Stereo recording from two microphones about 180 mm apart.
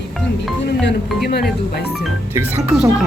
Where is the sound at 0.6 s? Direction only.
70° left (ahead or behind).